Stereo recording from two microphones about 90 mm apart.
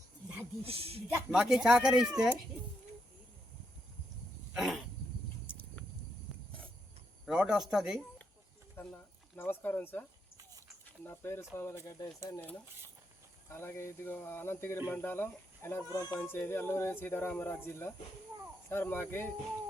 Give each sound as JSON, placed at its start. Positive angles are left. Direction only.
{"t": 0.6, "sound": "speech", "side_deg": -90}
{"t": 1.3, "sound": "speech", "side_deg": -5}
{"t": 4.5, "sound": "dog", "side_deg": -5}
{"t": 5.5, "sound": "a sound", "side_deg": 15}
{"t": 6.3, "sound": "cricket", "side_deg": 5}
{"t": 7.3, "sound": "speech", "side_deg": -10}
{"t": 8.8, "sound": "speech", "side_deg": 20}
{"t": 13.5, "sound": "speech", "side_deg": 30}
{"t": 15.9, "sound": "speech", "side_deg": 45}
{"t": 16.2, "sound": "speech", "side_deg": 25}